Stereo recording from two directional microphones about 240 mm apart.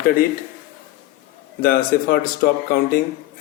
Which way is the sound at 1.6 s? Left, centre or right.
Left.